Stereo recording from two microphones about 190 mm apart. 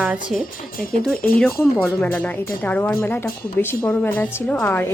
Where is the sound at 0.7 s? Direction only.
50° left (ahead or behind).